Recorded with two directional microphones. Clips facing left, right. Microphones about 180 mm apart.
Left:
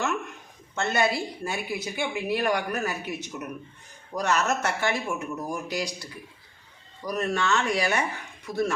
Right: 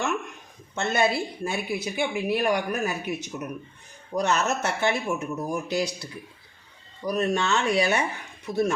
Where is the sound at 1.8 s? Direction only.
15° right (ahead or behind).